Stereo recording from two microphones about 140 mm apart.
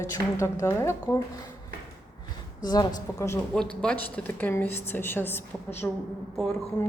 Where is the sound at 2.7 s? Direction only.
30° left (ahead or behind).